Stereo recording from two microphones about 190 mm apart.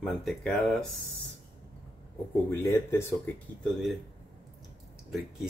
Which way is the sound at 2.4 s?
10° left (ahead or behind).